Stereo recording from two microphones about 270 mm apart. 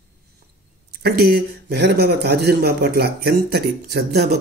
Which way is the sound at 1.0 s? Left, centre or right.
Right.